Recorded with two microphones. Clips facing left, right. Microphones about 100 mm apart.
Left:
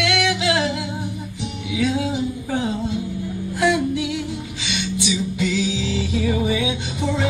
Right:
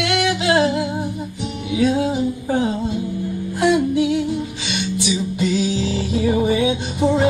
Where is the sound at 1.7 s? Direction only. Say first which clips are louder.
Right 4 dB; 35° right (ahead or behind).